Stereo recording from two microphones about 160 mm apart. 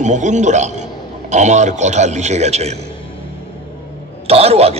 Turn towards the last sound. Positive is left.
turn(degrees=-40)  # may be behind; listen again after turning